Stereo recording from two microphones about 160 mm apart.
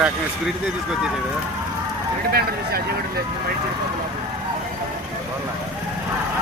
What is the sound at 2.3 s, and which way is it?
Speech, 70° right (ahead or behind).